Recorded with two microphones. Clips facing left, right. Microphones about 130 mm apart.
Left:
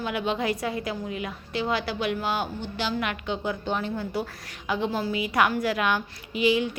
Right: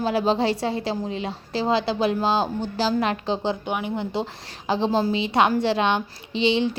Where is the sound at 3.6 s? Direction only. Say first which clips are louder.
Right 2 dB; 15° right (ahead or behind).